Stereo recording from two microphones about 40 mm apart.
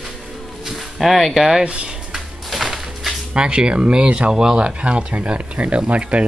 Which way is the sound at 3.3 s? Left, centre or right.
Right.